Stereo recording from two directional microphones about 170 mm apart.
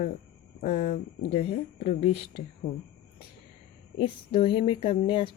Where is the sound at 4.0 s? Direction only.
30° left (ahead or behind).